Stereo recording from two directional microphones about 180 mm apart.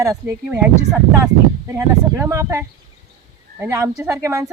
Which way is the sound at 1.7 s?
15° right (ahead or behind).